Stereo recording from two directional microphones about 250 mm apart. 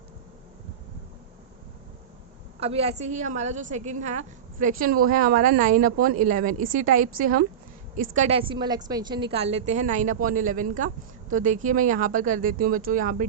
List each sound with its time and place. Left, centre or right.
2.6 s a woman's voice: right